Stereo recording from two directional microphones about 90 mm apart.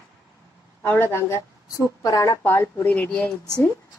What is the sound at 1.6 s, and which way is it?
Speech, 40° left (ahead or behind).